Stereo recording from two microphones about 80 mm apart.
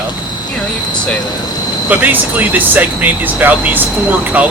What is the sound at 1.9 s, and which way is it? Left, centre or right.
Speech, right.